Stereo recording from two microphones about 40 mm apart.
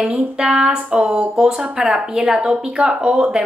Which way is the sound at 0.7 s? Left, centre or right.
Right.